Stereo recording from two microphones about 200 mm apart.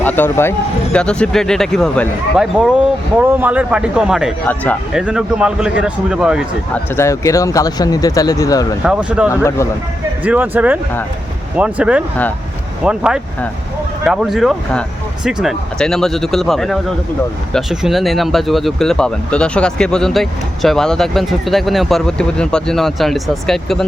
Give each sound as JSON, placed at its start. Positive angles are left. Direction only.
{"t": 0.0, "sound": "speech", "side_deg": 10}
{"t": 4.4, "sound": "speech", "side_deg": 5}
{"t": 4.9, "sound": "speech", "side_deg": -5}
{"t": 6.9, "sound": "speech", "side_deg": 15}
{"t": 8.8, "sound": "speech", "side_deg": -5}
{"t": 9.3, "sound": "speech", "side_deg": 15}
{"t": 10.2, "sound": "speech", "side_deg": -10}